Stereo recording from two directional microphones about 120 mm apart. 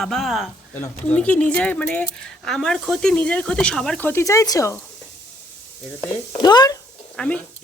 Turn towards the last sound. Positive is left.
turn(degrees=10)  # may be behind; listen again after turning